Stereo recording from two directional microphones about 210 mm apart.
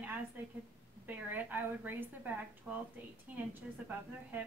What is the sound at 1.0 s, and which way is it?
A woman's voice, 10° right (ahead or behind).